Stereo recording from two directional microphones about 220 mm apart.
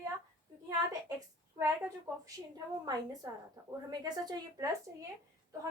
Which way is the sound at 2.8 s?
15° right (ahead or behind).